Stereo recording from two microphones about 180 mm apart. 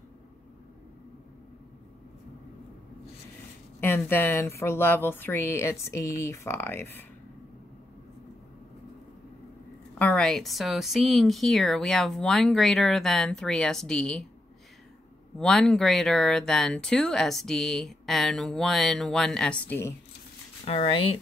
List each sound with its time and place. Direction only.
3.8 s speech: 10° left (ahead or behind)
9.9 s speech: 5° left (ahead or behind)
15.3 s speech: 5° left (ahead or behind)
20.6 s speech: 35° left (ahead or behind)